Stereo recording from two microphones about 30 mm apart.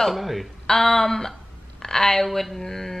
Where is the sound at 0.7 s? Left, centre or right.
Centre.